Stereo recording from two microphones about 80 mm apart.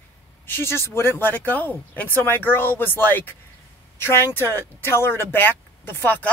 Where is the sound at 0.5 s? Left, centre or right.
Left.